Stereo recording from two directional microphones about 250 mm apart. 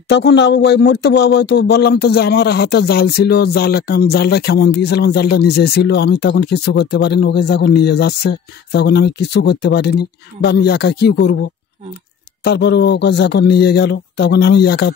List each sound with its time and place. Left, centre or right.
0.1 s speech: left
12.4 s a man's voice: left